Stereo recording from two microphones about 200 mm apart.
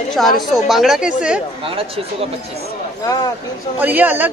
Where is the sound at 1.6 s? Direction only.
30° right (ahead or behind).